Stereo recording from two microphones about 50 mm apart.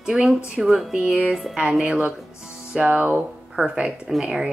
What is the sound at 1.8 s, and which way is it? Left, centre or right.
Speech, right.